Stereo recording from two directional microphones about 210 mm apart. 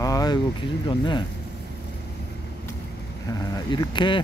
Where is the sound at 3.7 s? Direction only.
25° left (ahead or behind).